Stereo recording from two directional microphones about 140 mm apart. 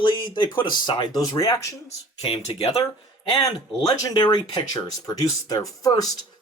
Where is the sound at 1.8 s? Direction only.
45° left (ahead or behind).